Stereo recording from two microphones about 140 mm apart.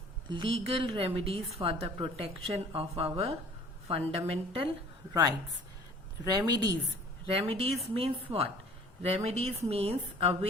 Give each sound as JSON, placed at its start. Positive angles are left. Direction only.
{"t": 0.3, "sound": "a woman's voice", "side_deg": -35}
{"t": 6.2, "sound": "a woman's voice", "side_deg": -25}
{"t": 7.3, "sound": "a woman's voice", "side_deg": -45}